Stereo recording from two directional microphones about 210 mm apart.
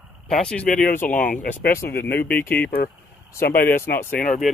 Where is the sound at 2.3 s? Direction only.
10° left (ahead or behind).